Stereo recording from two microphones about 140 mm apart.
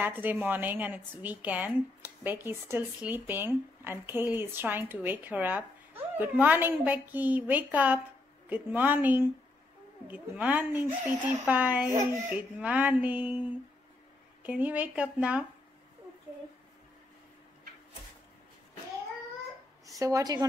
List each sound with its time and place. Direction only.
0.0 s speech: 15° right (ahead or behind)
19.9 s a woman's voice: 25° right (ahead or behind)